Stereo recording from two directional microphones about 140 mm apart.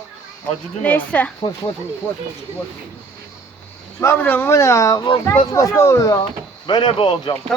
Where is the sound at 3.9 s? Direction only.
20° left (ahead or behind).